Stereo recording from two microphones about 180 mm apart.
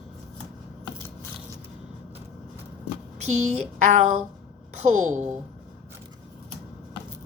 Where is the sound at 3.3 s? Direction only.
40° right (ahead or behind).